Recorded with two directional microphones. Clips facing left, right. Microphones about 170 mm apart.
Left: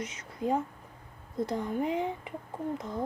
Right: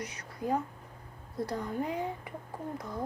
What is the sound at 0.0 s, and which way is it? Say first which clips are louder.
Speech: left 3 dB; 20° left (ahead or behind).